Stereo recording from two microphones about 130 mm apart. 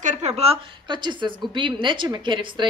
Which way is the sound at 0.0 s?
60° right (ahead or behind).